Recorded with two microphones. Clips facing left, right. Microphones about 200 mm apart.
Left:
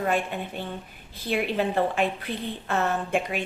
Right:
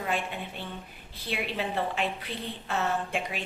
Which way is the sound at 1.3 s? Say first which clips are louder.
Left 7 dB; 50° left (ahead or behind).